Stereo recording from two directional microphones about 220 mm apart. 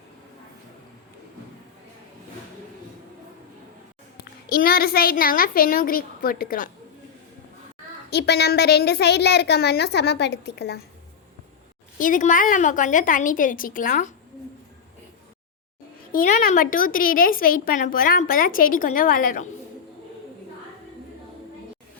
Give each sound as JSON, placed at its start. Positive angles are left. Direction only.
{"t": 4.2, "sound": "a woman's voice", "side_deg": 45}
{"t": 8.1, "sound": "a woman's voice", "side_deg": 50}
{"t": 11.9, "sound": "a woman's voice", "side_deg": 35}
{"t": 16.1, "sound": "a woman's voice", "side_deg": 35}